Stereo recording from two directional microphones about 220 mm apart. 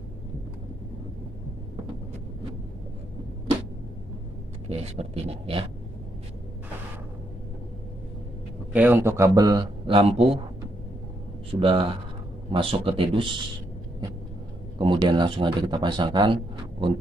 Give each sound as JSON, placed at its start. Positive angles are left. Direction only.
{"t": 4.6, "sound": "speech", "side_deg": -30}
{"t": 8.7, "sound": "a man's voice", "side_deg": -10}
{"t": 11.6, "sound": "speech", "side_deg": -25}
{"t": 14.8, "sound": "speech", "side_deg": -20}